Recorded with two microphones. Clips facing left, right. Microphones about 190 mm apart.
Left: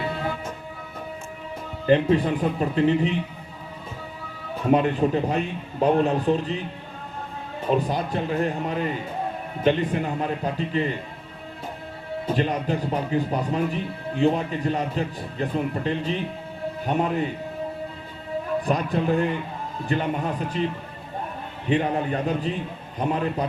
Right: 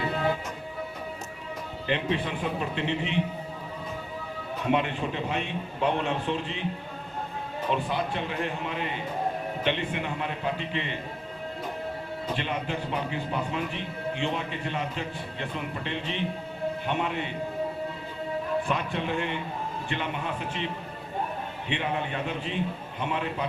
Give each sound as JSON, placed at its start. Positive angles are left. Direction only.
{"t": 1.9, "sound": "a man's voice", "side_deg": 40}
{"t": 4.6, "sound": "a man's voice", "side_deg": 40}
{"t": 7.7, "sound": "a man's voice", "side_deg": 40}
{"t": 12.3, "sound": "a man's voice", "side_deg": 40}
{"t": 18.6, "sound": "a man's voice", "side_deg": 40}
{"t": 21.7, "sound": "a man's voice", "side_deg": 40}